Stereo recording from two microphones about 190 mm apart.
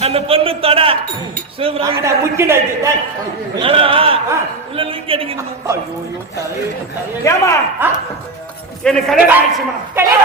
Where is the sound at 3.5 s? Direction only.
30° right (ahead or behind).